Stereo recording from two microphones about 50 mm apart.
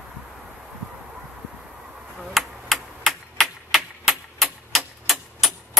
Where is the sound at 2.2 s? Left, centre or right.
Centre.